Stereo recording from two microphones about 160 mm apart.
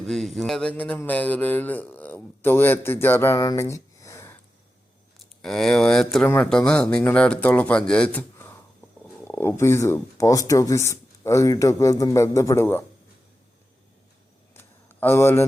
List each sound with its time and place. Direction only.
0.0 s speech: centre (ahead or behind); by 4.4 s 15° left (ahead or behind)
5.2 s speech: centre (ahead or behind)
14.5 s a sound: 15° left (ahead or behind)